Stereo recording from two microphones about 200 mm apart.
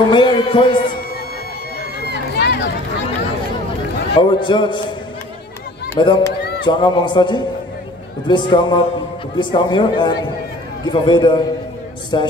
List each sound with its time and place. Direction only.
0.1 s a man's voice: 25° left (ahead or behind)
2.4 s a sound: 60° left (ahead or behind)
4.1 s a man's voice: 25° left (ahead or behind)
5.9 s a man's voice: 20° left (ahead or behind)